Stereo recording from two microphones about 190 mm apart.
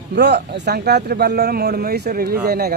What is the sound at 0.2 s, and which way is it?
Speech, 60° right (ahead or behind).